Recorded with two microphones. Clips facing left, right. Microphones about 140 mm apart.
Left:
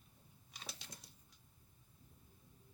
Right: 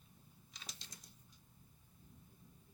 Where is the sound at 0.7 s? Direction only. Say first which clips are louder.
Left 5 dB; 65° left (ahead or behind).